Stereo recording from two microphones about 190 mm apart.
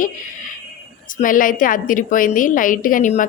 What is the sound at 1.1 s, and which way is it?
A woman's voice, 45° left (ahead or behind).